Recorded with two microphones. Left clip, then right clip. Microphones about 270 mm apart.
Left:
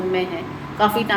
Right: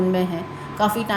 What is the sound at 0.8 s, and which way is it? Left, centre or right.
Speech, right.